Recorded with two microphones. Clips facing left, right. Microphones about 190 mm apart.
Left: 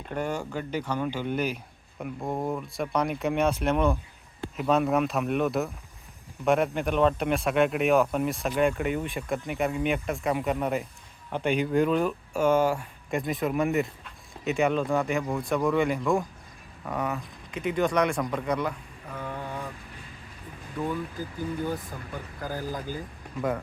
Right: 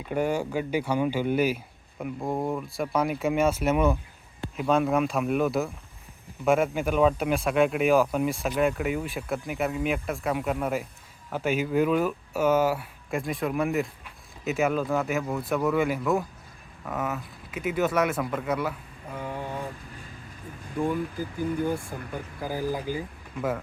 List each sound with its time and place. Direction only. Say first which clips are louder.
0.1 s speech: right 4 dB; 10° right (ahead or behind)
21.9 s speech: right 3 dB; 15° right (ahead or behind)